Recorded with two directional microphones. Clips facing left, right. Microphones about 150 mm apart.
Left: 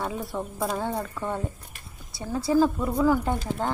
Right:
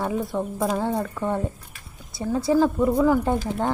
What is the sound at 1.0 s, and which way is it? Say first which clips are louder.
A woman's voice: right 5 dB; 15° right (ahead or behind).